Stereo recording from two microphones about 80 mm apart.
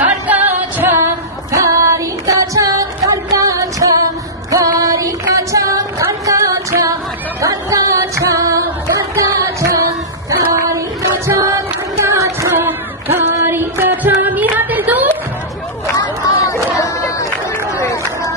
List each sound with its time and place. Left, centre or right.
0.0 s music: centre
0.9 s female singing: right
6.2 s music: right
12.5 s a sound: right
16.7 s a sound: left
17.7 s run: left